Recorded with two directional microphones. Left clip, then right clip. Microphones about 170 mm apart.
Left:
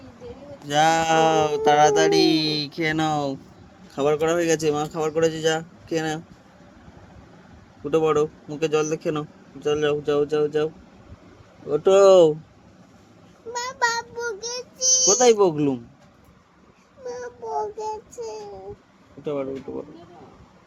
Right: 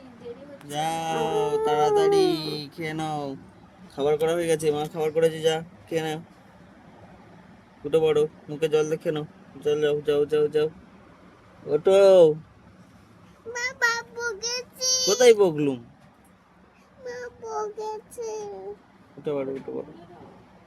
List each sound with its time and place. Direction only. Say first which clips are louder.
0.7 s speech: left 9 dB; 55° left (ahead or behind); by 6.2 s 40° left (ahead or behind)
7.9 s speech: left 1 dB; 35° left (ahead or behind)
11.7 s speech: left 2 dB; 25° left (ahead or behind)
14.2 s child singing: even; 10° right (ahead or behind)
15.2 s speech: right 3 dB; 25° left (ahead or behind)
17.1 s child singing: left 4 dB; 5° right (ahead or behind)
18.2 s a child's voice: right 1 dB; 20° right (ahead or behind)
19.2 s speech: left 1 dB; 20° left (ahead or behind)